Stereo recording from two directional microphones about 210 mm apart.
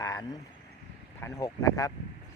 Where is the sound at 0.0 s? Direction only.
15° left (ahead or behind).